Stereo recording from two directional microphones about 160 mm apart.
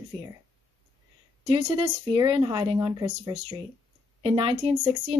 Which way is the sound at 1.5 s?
35° right (ahead or behind).